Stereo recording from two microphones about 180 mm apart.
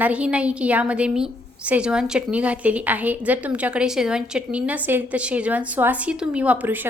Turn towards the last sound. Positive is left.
turn(degrees=-10)  # may be behind; listen again after turning